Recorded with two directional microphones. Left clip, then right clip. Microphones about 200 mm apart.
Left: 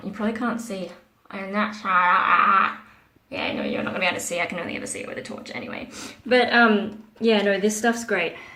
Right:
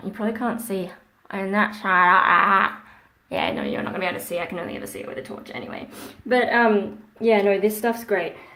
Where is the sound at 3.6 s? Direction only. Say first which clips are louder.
Left 2 dB; 20° right (ahead or behind).